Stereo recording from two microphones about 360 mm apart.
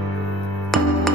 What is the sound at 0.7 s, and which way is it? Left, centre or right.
Music, centre.